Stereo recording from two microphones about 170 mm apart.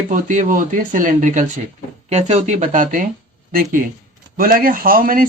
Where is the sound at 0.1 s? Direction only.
50° right (ahead or behind).